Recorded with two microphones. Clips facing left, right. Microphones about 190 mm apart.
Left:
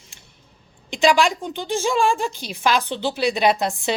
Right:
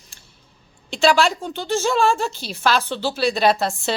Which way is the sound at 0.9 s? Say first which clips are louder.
Even; 15° left (ahead or behind).